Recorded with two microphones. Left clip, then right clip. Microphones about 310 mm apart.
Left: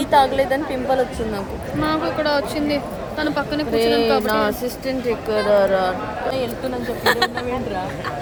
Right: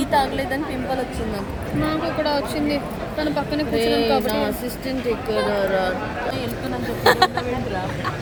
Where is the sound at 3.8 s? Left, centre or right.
Centre.